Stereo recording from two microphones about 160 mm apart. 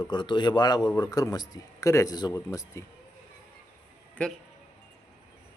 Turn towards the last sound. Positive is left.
turn(degrees=5)  # may be behind; listen again after turning